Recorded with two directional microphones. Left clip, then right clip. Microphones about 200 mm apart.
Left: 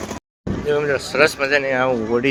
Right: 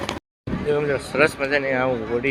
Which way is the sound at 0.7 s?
15° left (ahead or behind).